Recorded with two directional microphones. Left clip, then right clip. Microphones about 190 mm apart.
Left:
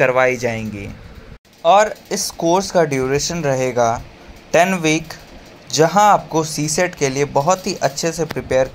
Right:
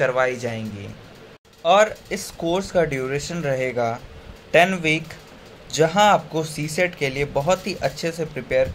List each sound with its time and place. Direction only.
0.0 s speech: 30° left (ahead or behind)
1.6 s speech: 10° left (ahead or behind)